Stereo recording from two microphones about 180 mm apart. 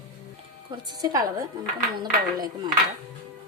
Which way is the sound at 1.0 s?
20° right (ahead or behind).